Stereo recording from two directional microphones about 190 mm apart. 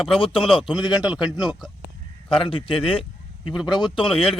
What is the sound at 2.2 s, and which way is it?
A man's voice, 30° left (ahead or behind).